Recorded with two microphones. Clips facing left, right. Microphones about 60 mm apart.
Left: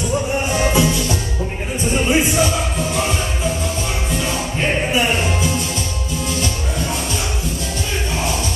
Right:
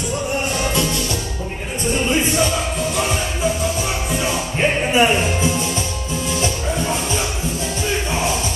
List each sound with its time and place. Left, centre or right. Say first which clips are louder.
0.5 s music: left 4 dB; centre
2.0 s music: left 2 dB; centre
4.2 s music: right 3 dB; centre